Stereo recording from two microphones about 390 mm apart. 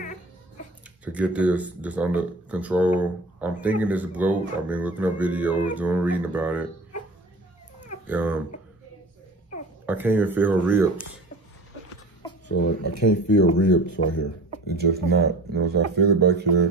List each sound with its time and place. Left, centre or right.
1.0 s speech: centre
8.1 s speech: centre
9.8 s speech: centre
12.5 s speech: left
14.8 s speech: right